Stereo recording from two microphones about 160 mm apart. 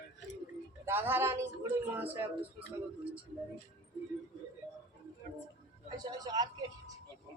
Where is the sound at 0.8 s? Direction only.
15° right (ahead or behind).